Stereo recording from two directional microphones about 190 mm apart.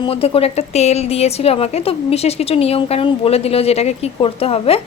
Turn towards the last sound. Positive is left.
turn(degrees=30)  # may be behind; listen again after turning